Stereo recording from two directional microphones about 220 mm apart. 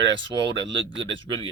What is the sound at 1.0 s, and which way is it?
Speech, 25° right (ahead or behind).